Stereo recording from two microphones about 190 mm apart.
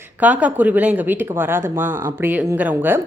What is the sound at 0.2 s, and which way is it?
A woman's voice, 10° right (ahead or behind).